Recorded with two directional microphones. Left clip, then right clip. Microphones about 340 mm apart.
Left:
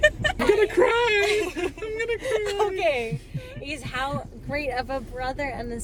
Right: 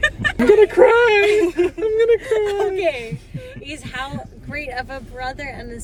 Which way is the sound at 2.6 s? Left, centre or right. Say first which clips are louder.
Right 3 dB; centre.